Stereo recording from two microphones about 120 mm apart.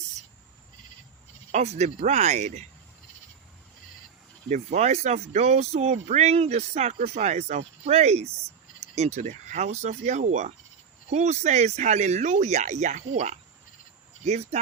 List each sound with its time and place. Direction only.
1.5 s speech: 65° right (ahead or behind)
4.4 s speech: 70° right (ahead or behind)